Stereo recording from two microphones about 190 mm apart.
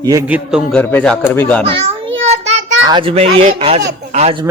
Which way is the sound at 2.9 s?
30° right (ahead or behind).